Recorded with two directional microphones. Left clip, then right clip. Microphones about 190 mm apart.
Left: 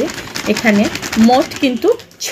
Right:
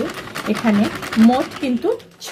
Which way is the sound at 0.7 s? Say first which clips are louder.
Left 5 dB; 40° left (ahead or behind).